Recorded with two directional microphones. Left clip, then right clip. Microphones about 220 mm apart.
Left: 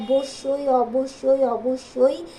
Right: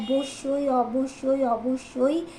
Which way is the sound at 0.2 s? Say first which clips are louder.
Left 2 dB; 15° left (ahead or behind).